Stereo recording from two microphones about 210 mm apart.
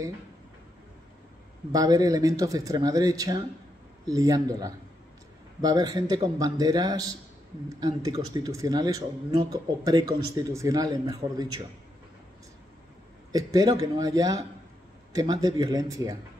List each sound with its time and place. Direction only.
1.7 s speech: 15° right (ahead or behind)
13.3 s speech: 15° right (ahead or behind)